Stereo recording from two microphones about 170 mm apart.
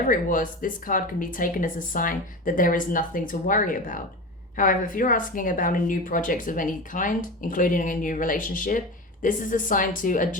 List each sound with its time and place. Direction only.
0.0 s a woman's voice: 55° left (ahead or behind)